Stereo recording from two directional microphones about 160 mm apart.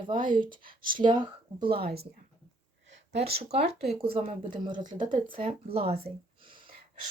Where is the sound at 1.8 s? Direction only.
75° right (ahead or behind).